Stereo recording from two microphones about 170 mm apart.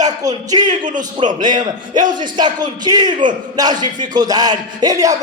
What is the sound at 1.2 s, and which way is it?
A man's voice, 25° right (ahead or behind).